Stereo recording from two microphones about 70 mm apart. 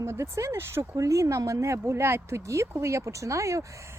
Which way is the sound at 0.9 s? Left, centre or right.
Right.